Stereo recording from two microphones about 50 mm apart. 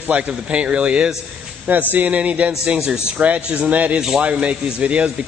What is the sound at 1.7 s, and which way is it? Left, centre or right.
A man's voice, right.